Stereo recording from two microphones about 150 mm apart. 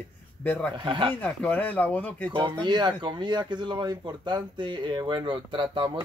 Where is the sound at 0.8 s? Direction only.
35° right (ahead or behind).